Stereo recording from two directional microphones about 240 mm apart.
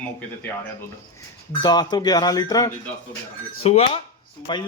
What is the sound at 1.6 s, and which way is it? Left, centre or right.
A man's voice, centre.